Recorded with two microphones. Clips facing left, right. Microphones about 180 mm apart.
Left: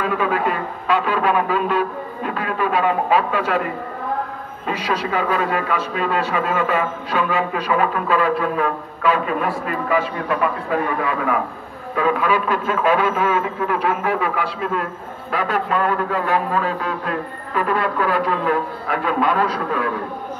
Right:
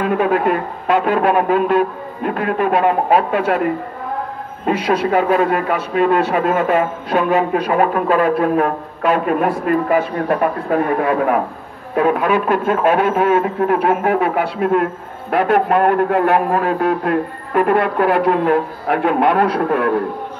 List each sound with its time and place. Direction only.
0.0 s a man's voice: 55° right (ahead or behind)
4.6 s a man's voice: 55° right (ahead or behind)